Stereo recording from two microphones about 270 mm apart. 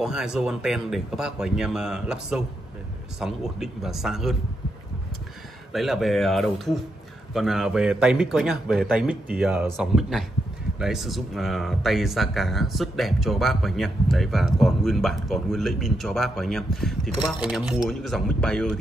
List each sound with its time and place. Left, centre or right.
0.0 s speech: centre
5.7 s speech: centre